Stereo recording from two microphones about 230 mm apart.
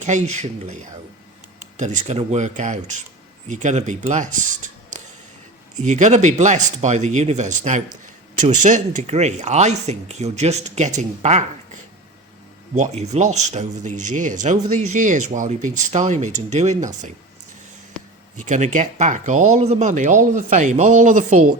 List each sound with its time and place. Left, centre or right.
0.0 s speech: right
12.7 s speech: right
18.4 s speech: right